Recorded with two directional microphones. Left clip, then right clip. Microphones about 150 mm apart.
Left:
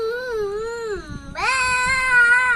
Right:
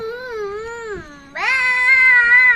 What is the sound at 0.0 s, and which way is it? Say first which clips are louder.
Baby cry: left 2 dB; 5° right (ahead or behind).